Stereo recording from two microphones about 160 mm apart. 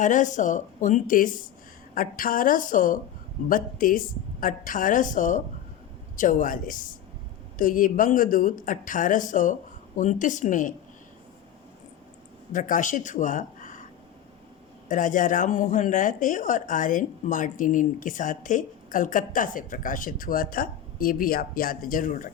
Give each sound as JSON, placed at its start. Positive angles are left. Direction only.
{"t": 0.0, "sound": "a woman's voice", "side_deg": 50}
{"t": 12.5, "sound": "speech", "side_deg": 55}
{"t": 14.8, "sound": "speech", "side_deg": 55}